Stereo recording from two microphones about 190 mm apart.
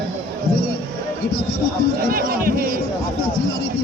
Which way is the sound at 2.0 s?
50° right (ahead or behind).